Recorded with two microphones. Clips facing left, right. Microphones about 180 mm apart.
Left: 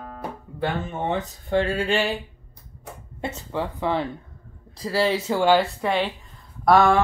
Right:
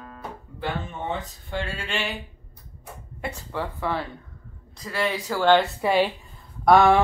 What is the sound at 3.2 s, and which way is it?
Speech, 20° left (ahead or behind).